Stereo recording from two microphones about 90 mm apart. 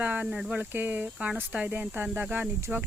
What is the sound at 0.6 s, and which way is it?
Speech, 20° right (ahead or behind).